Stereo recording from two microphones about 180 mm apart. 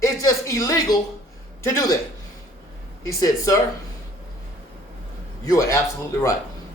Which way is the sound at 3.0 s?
20° left (ahead or behind).